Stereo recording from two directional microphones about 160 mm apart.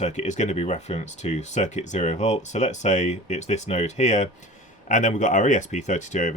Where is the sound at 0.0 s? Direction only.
45° left (ahead or behind).